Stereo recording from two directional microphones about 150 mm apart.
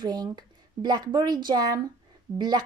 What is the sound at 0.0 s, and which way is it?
A woman's voice, 25° right (ahead or behind).